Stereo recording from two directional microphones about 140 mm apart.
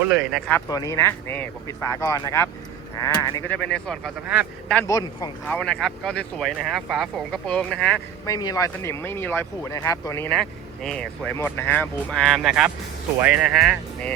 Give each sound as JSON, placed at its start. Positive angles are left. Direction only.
{"t": 0.2, "sound": "speech", "side_deg": -5}
{"t": 0.7, "sound": "speech", "side_deg": 25}
{"t": 3.4, "sound": "speech", "side_deg": 10}
{"t": 4.9, "sound": "speech", "side_deg": 25}
{"t": 5.5, "sound": "speech", "side_deg": 10}
{"t": 8.2, "sound": "speech", "side_deg": 25}
{"t": 10.2, "sound": "speech", "side_deg": 5}
{"t": 11.3, "sound": "speech", "side_deg": 15}